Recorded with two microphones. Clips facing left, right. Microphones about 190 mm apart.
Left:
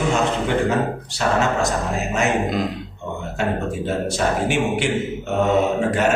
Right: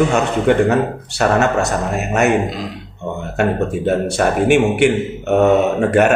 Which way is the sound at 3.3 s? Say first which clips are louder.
Right 6 dB; 60° right (ahead or behind).